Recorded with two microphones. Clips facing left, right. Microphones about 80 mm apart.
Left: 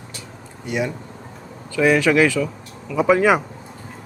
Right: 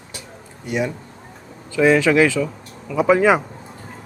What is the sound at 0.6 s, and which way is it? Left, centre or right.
Speech, right.